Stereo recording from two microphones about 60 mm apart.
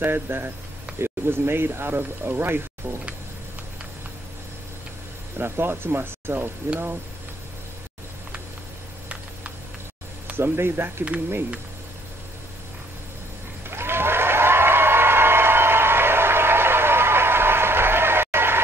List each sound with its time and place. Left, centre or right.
0.0 s speech: right
5.4 s speech: right
10.3 s speech: right
13.7 s a sound: right